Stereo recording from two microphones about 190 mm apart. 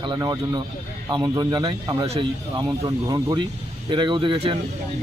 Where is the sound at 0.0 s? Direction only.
25° right (ahead or behind).